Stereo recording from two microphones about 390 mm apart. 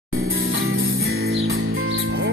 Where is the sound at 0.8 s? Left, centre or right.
Right.